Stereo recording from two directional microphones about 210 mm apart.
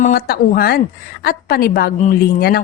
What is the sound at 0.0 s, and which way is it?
A woman's voice, 45° left (ahead or behind).